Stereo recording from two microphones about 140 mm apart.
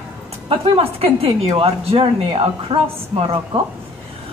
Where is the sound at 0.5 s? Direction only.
45° right (ahead or behind).